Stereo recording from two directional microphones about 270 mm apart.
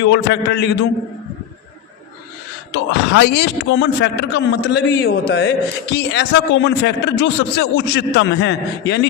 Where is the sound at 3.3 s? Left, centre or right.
Left.